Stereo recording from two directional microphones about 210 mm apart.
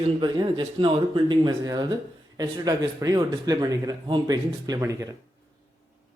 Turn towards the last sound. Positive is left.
turn(degrees=-15)  # may be behind; listen again after turning